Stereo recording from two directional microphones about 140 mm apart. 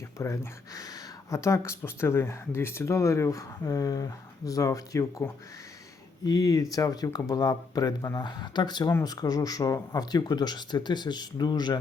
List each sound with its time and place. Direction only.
0.2 s speech: 25° left (ahead or behind)